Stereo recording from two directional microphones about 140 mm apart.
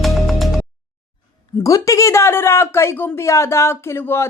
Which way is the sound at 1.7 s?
25° left (ahead or behind).